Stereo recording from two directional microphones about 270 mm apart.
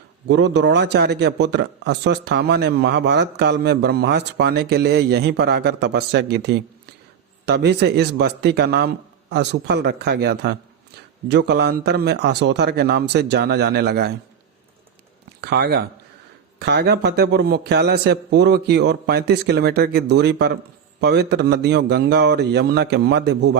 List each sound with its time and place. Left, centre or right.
0.3 s a man's voice: right
15.4 s a man's voice: right